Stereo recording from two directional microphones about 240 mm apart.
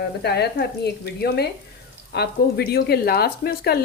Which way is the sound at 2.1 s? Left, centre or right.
Left.